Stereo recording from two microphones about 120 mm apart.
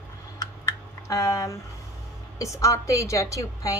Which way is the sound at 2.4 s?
25° left (ahead or behind).